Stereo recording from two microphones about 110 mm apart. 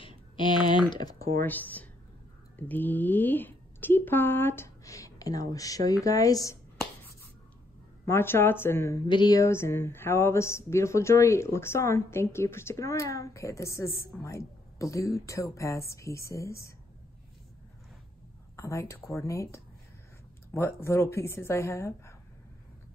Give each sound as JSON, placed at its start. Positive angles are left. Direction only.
{"t": 0.8, "sound": "speech", "side_deg": 35}
{"t": 1.4, "sound": "speech", "side_deg": 15}
{"t": 8.1, "sound": "speech", "side_deg": 20}
{"t": 9.0, "sound": "speech", "side_deg": 40}
{"t": 9.5, "sound": "speech", "side_deg": 25}
{"t": 18.6, "sound": "speech", "side_deg": 25}